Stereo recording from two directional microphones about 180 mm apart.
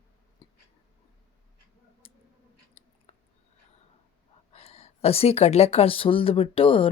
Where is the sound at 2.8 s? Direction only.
30° left (ahead or behind).